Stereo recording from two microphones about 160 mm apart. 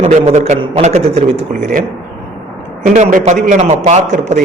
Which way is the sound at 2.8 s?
50° right (ahead or behind).